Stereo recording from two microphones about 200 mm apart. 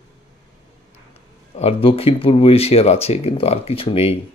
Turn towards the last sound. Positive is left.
turn(degrees=30)  # may be behind; listen again after turning